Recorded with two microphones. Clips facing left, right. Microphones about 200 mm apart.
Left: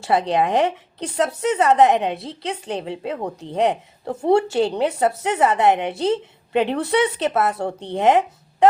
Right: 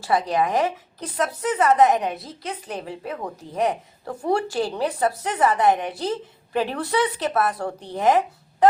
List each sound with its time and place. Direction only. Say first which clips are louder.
0.0 s a woman's voice: left 2 dB; 25° left (ahead or behind)